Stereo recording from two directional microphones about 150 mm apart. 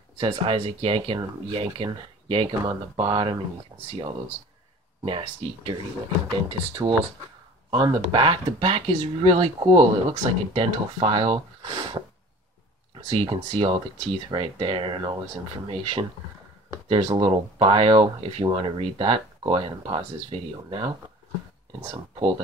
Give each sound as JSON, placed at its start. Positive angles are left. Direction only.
{"t": 0.2, "sound": "speech", "side_deg": -40}
{"t": 5.0, "sound": "speech", "side_deg": -35}
{"t": 13.1, "sound": "speech", "side_deg": -40}
{"t": 21.9, "sound": "speech", "side_deg": -35}